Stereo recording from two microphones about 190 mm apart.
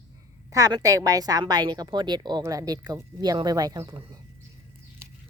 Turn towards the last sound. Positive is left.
turn(degrees=-20)  # may be behind; listen again after turning